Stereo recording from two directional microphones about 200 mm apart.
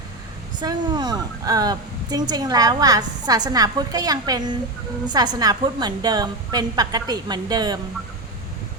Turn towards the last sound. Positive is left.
turn(degrees=-20)  # may be behind; listen again after turning